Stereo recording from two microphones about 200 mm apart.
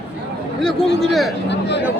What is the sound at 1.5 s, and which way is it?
Speech, 60° left (ahead or behind).